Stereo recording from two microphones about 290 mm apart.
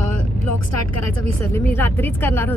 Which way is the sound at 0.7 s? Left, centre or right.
Left.